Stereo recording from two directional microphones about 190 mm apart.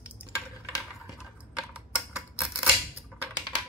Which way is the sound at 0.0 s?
5° right (ahead or behind).